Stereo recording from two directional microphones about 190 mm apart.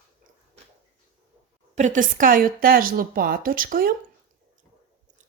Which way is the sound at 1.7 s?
40° right (ahead or behind).